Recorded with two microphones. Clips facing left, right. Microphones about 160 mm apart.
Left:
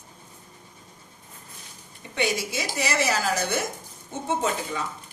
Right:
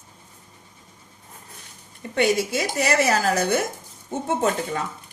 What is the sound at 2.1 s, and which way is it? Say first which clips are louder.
A woman's voice: right 6 dB; 50° right (ahead or behind).